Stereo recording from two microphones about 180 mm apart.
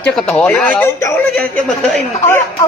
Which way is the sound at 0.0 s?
5° left (ahead or behind).